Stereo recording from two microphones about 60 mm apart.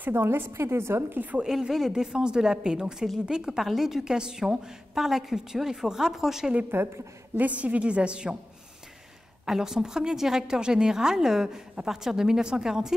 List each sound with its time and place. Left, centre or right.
0.1 s a woman's voice: right
1.4 s a woman's voice: centre
6.7 s a woman's voice: right
7.3 s a woman's voice: right
9.5 s a woman's voice: centre